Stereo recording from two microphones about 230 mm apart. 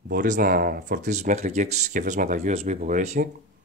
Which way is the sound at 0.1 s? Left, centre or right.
Right.